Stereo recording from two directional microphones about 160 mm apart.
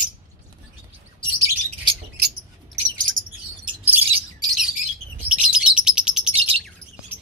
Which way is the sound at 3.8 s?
10° right (ahead or behind).